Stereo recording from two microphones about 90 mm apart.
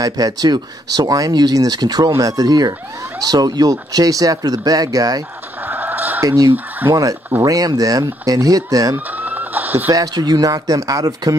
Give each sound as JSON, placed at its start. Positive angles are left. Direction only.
{"t": 0.0, "sound": "speech", "side_deg": -45}
{"t": 5.7, "sound": "chicken", "side_deg": -20}
{"t": 6.2, "sound": "speech", "side_deg": -45}
{"t": 8.9, "sound": "a sound", "side_deg": -20}
{"t": 9.8, "sound": "speech", "side_deg": -45}